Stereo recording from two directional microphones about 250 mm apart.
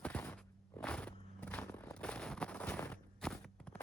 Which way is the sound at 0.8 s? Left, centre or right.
Centre.